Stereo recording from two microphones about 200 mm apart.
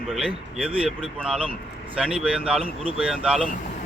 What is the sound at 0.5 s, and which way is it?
Speech, centre (ahead or behind).